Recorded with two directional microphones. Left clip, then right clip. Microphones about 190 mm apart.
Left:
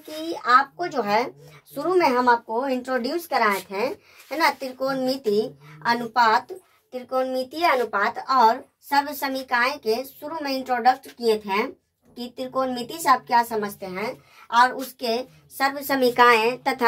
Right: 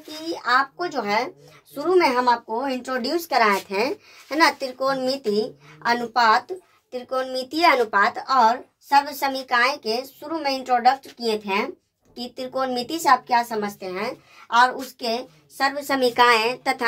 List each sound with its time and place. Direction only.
0.3 s speech: 25° left (ahead or behind); by 11.0 s 30° right (ahead or behind)
12.2 s speech: 30° right (ahead or behind)
14.5 s a woman's voice: 20° right (ahead or behind)
15.6 s a woman's voice: centre (ahead or behind)